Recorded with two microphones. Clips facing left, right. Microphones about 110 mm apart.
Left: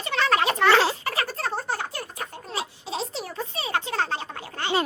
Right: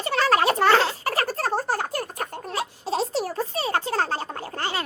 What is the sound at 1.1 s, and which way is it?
Giggle, 40° right (ahead or behind).